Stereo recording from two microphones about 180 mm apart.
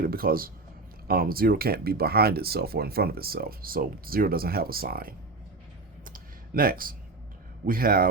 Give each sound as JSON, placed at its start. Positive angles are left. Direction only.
{"t": 0.0, "sound": "speech", "side_deg": -55}
{"t": 6.1, "sound": "a sound", "side_deg": -55}
{"t": 7.7, "sound": "speech", "side_deg": -55}